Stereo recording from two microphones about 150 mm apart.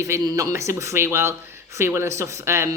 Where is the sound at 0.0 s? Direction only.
20° right (ahead or behind).